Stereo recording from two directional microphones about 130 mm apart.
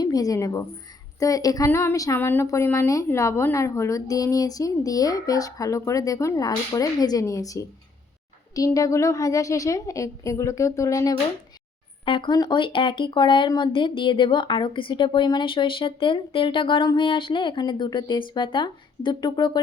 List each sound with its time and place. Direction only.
0.0 s a woman's voice: 30° left (ahead or behind)
12.0 s speech: 40° left (ahead or behind)